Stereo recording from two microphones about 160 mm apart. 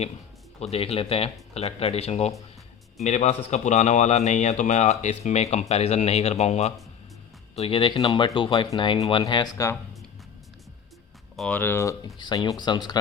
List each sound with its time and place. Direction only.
0.6 s speech: 40° left (ahead or behind); by 9.7 s 20° left (ahead or behind)
11.3 s speech: 10° left (ahead or behind); by 13.0 s 25° left (ahead or behind)